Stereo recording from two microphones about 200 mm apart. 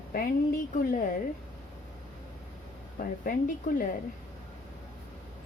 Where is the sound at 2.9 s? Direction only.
45° left (ahead or behind).